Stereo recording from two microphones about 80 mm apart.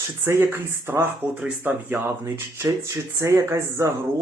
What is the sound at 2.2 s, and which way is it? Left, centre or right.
Speech, right.